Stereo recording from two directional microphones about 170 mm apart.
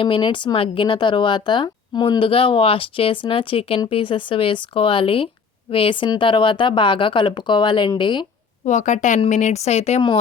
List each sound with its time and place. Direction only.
0.0 s speech: 30° left (ahead or behind)
8.6 s speech: 45° left (ahead or behind)